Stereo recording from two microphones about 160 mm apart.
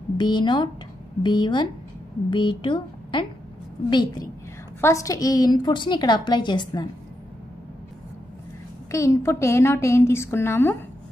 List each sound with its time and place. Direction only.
0.2 s a woman's voice: 30° left (ahead or behind)
8.9 s a woman's voice: 20° left (ahead or behind)